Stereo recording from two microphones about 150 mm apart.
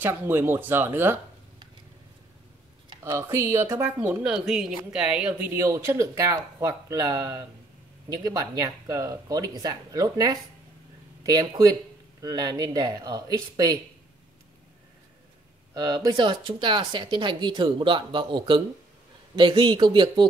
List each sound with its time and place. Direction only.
0.0 s speech: 15° right (ahead or behind)
3.0 s speech: 15° right (ahead or behind)
4.2 s speech: 5° right (ahead or behind); by 13.7 s 25° right (ahead or behind)
15.7 s speech: 25° right (ahead or behind)